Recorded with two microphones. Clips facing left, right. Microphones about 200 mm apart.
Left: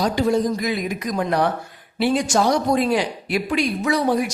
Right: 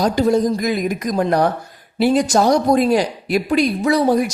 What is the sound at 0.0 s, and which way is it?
A woman's voice, 40° right (ahead or behind).